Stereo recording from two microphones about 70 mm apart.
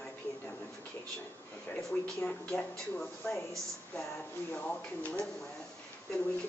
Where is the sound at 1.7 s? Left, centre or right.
Centre.